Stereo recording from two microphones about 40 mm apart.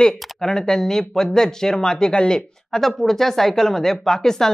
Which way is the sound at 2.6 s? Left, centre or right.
Centre.